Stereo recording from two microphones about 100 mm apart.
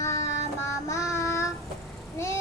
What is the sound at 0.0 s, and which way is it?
Child singing, 30° left (ahead or behind).